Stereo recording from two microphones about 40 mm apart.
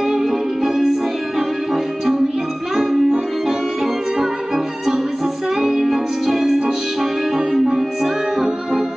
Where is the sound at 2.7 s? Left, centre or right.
Centre.